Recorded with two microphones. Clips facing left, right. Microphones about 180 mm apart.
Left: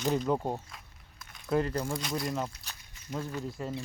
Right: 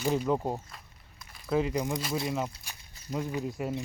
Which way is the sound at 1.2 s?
Centre (ahead or behind).